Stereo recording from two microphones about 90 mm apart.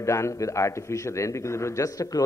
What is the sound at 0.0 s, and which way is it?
A man's voice, 35° left (ahead or behind).